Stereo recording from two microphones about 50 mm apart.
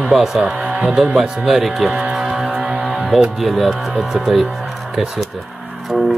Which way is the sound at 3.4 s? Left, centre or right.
Centre.